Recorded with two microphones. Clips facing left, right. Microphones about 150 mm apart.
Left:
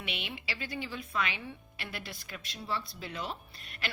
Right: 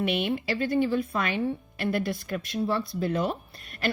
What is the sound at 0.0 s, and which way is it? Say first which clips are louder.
Speech: right 14 dB; 50° right (ahead or behind).